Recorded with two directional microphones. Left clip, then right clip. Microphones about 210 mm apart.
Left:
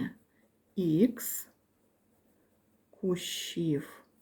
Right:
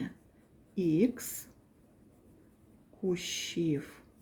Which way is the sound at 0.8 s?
20° left (ahead or behind).